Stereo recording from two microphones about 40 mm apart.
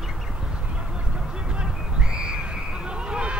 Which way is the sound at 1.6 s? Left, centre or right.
Right.